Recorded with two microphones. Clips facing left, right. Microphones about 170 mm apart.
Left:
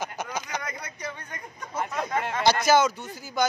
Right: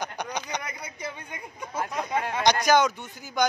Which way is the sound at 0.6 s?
10° right (ahead or behind).